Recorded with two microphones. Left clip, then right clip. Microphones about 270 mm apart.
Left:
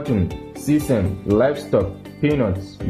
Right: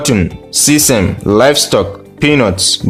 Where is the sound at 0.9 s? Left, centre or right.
Right.